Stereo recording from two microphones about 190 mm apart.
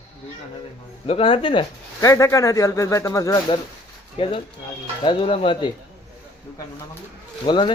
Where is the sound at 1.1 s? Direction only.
30° left (ahead or behind).